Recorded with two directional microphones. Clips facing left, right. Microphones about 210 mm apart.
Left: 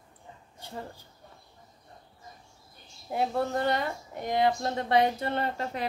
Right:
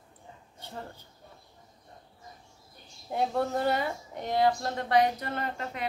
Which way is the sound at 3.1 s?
5° left (ahead or behind).